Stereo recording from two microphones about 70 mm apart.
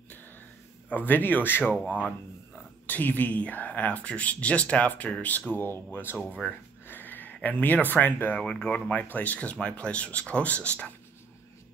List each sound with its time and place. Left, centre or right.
0.8 s speech: left
6.9 s a sound: left
7.4 s speech: left